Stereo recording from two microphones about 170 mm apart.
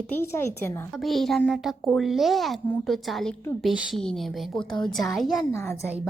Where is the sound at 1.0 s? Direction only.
Centre (ahead or behind).